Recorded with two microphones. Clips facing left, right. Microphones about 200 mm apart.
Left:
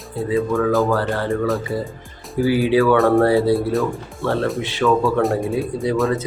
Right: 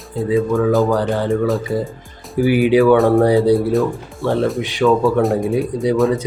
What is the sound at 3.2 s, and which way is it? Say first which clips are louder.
Speech: right 3 dB; 15° right (ahead or behind).